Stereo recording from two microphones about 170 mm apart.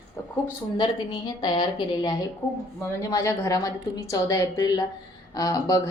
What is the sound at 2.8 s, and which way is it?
A woman's voice, 20° left (ahead or behind).